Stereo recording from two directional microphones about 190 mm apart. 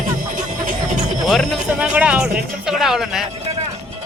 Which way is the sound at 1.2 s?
Centre (ahead or behind).